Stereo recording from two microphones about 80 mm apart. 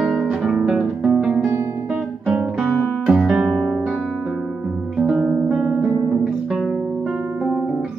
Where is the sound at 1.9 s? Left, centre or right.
Centre.